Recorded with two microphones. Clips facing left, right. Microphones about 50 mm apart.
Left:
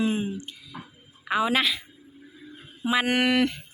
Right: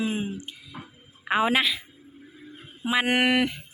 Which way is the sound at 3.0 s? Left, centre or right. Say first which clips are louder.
Right 1 dB; right.